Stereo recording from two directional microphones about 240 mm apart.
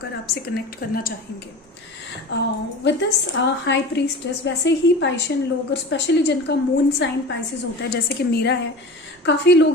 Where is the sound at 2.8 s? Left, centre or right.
Left.